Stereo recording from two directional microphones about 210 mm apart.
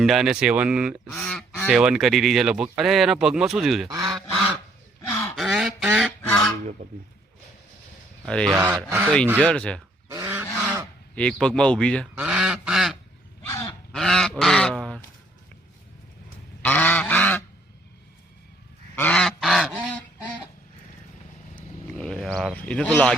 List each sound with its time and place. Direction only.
0.0 s speech: centre (ahead or behind)
3.8 s speech: 15° right (ahead or behind)
5.4 s a sound: centre (ahead or behind)
8.4 s speech: 20° right (ahead or behind)
9.5 s speech: 5° left (ahead or behind)
10.1 s goose: 10° right (ahead or behind)
11.1 s speech: 5° left (ahead or behind)
12.1 s goose: 5° right (ahead or behind)
13.5 s grunt: 15° left (ahead or behind)
13.9 s goose: centre (ahead or behind)
16.6 s goose: 10° left (ahead or behind)
18.9 s goose: 5° left (ahead or behind)
21.5 s a sound: 5° left (ahead or behind)